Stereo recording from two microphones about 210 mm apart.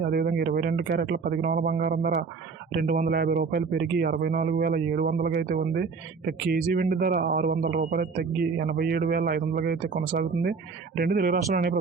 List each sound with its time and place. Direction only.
0.0 s speech: 45° right (ahead or behind)